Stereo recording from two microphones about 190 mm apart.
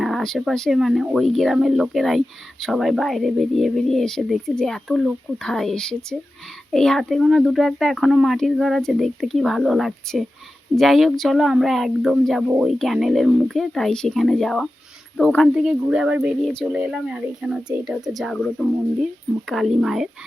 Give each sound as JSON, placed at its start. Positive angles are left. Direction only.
{"t": 0.0, "sound": "speech", "side_deg": 0}